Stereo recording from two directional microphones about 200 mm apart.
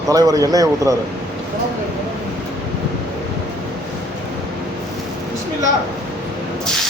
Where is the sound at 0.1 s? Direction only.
15° right (ahead or behind).